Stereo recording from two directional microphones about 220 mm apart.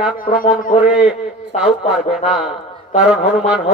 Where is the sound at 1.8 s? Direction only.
30° left (ahead or behind).